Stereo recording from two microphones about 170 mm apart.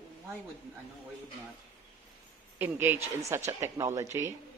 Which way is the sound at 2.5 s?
10° right (ahead or behind).